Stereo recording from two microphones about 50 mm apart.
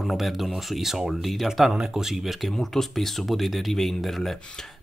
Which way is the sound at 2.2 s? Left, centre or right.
Centre.